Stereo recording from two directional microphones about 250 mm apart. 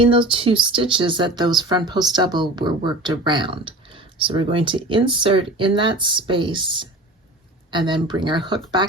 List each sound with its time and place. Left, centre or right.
0.0 s speech: right